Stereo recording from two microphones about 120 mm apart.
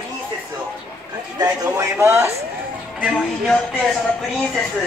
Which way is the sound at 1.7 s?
20° right (ahead or behind).